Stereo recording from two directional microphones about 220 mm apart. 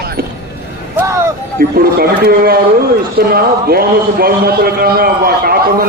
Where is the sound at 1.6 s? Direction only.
45° right (ahead or behind).